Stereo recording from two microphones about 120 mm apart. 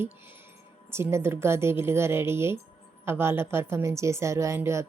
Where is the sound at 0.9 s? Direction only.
20° right (ahead or behind).